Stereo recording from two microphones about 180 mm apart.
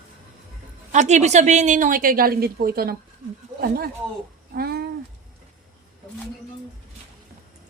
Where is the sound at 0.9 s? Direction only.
40° right (ahead or behind); by 2.9 s 60° right (ahead or behind).